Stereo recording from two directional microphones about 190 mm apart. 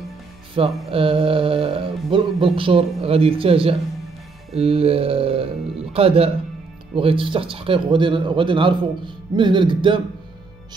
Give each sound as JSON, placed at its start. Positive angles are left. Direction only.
{"t": 0.6, "sound": "a man's voice", "side_deg": -30}